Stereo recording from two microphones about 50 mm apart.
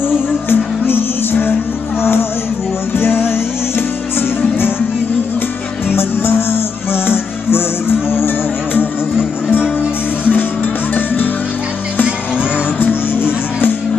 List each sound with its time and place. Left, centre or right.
0.1 s music: left
2.9 s music: left
6.0 s music: left
10.2 s music: left
12.8 s music: left